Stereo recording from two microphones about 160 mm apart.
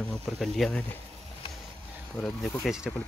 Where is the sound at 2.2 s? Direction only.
Centre (ahead or behind).